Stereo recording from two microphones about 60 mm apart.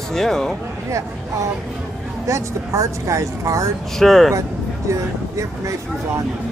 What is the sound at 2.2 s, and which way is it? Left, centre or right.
Speech, right.